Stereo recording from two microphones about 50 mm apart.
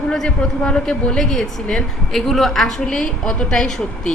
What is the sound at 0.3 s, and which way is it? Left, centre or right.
Speech, centre.